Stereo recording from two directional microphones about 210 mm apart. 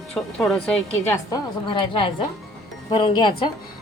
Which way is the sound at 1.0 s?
20° left (ahead or behind).